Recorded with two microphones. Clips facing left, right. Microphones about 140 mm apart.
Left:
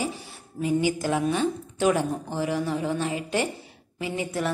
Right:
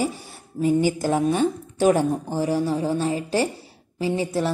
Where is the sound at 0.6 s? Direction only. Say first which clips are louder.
Right 4 dB; 40° right (ahead or behind).